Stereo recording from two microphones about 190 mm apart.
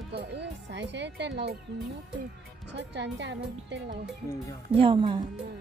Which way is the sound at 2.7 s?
65° right (ahead or behind).